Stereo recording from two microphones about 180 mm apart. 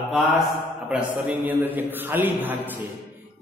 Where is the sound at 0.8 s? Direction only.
10° right (ahead or behind).